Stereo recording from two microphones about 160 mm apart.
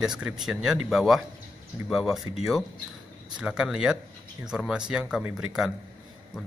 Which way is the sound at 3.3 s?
5° right (ahead or behind).